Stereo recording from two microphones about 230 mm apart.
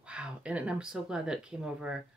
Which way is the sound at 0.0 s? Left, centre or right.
Centre.